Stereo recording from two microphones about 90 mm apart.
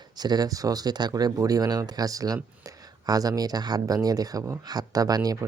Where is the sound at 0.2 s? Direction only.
50° right (ahead or behind).